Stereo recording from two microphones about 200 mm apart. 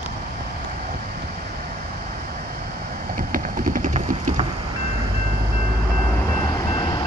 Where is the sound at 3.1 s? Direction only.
40° right (ahead or behind).